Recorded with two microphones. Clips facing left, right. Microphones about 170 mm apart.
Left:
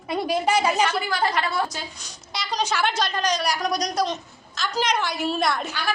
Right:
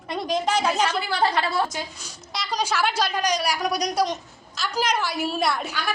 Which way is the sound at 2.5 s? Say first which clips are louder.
Even; 10° right (ahead or behind).